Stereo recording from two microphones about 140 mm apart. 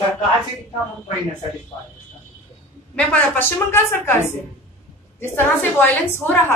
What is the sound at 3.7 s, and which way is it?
A woman's voice, 15° left (ahead or behind).